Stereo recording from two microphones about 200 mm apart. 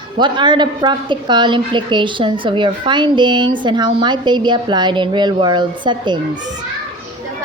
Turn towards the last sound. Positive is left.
turn(degrees=-20)  # may be behind; listen again after turning